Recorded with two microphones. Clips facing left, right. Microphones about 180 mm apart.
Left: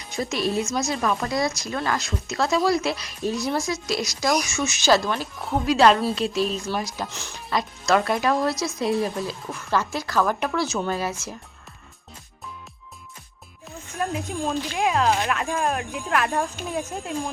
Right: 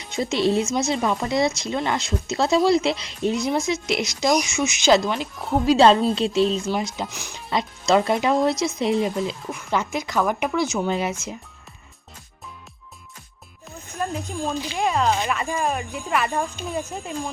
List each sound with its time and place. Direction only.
0.0 s speech: 25° right (ahead or behind)
7.5 s speech: 25° right (ahead or behind)
14.0 s speech: 5° left (ahead or behind)